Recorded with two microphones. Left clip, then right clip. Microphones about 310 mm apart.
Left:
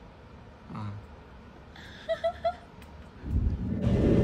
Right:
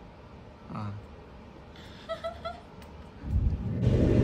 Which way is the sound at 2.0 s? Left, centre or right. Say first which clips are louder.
Left 7 dB; centre.